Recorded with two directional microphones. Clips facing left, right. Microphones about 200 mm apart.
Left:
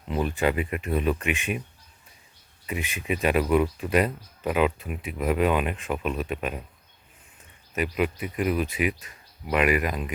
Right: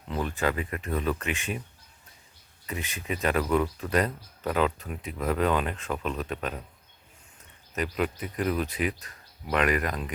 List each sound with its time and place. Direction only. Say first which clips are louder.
0.1 s speech: left 4 dB; 15° left (ahead or behind)
2.6 s speech: left 4 dB; 15° left (ahead or behind)
7.8 s speech: left 3 dB; 10° left (ahead or behind)